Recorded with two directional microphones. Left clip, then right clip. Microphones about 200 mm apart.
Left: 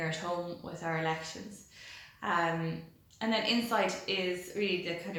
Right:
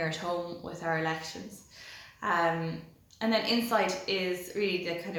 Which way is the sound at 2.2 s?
15° right (ahead or behind).